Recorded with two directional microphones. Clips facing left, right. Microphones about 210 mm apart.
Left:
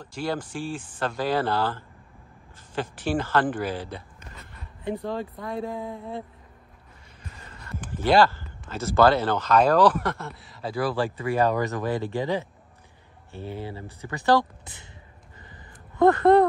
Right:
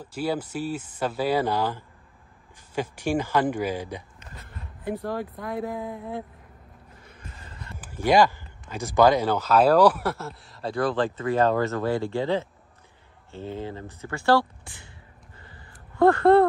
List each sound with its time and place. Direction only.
0.0 s speech: 10° right (ahead or behind)
5.1 s speech: 5° right (ahead or behind)
7.7 s speech: 10° right (ahead or behind); by 12.4 s 15° left (ahead or behind)
13.7 s speech: 15° left (ahead or behind)
16.0 s speech: 20° left (ahead or behind)